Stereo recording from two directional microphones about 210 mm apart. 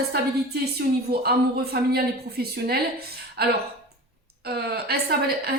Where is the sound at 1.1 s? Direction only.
50° right (ahead or behind).